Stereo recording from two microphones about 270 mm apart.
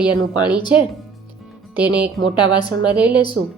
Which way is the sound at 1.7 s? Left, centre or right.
Centre.